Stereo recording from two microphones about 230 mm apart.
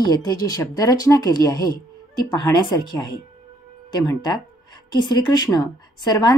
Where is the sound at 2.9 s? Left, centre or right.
Centre.